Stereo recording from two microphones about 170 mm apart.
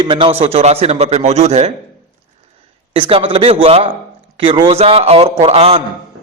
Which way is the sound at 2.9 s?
30° right (ahead or behind).